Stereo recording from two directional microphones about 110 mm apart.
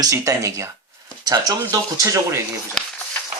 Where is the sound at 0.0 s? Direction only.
30° right (ahead or behind).